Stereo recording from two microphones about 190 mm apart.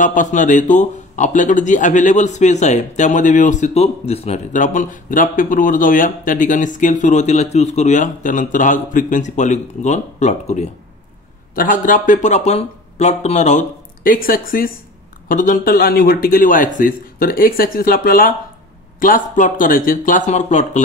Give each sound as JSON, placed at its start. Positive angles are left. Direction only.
{"t": 0.0, "sound": "a man's voice", "side_deg": 40}